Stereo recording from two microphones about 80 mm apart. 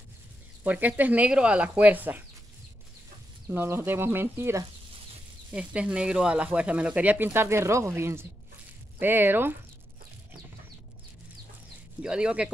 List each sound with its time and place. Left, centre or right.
0.7 s speech: right
3.4 s speech: right
5.5 s speech: centre
7.2 s speech: right
12.0 s speech: centre